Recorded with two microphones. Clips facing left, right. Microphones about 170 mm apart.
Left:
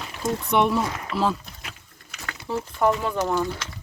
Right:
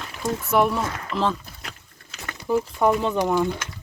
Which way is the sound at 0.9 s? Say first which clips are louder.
Even; 10° left (ahead or behind).